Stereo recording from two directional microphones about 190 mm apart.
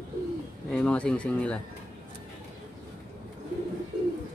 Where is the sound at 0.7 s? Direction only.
5° left (ahead or behind).